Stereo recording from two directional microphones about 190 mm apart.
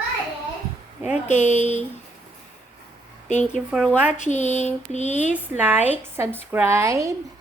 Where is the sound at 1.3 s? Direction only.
35° left (ahead or behind).